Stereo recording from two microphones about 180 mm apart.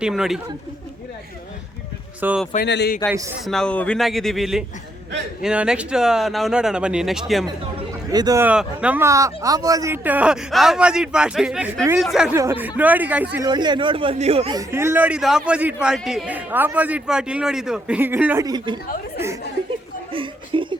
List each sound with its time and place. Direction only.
0.0 s speech: centre (ahead or behind)
2.2 s speech: 10° right (ahead or behind)
2.6 s speech: 70° left (ahead or behind)
3.4 s speech: 5° left (ahead or behind)
7.4 s a sound: 20° right (ahead or behind)
8.4 s speech: 5° right (ahead or behind)
13.4 s speech: 25° right (ahead or behind)
14.5 s speech: 15° right (ahead or behind)
18.4 s speech: 25° right (ahead or behind)
20.1 s chuckle: 30° right (ahead or behind)